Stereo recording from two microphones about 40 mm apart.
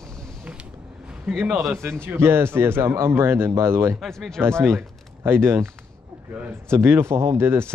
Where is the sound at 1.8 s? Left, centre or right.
Right.